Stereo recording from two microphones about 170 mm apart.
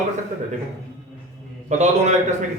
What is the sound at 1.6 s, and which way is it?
Speech, 40° right (ahead or behind).